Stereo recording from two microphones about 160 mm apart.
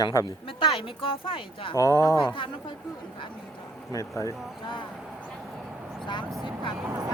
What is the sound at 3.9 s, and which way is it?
Speech, 20° left (ahead or behind).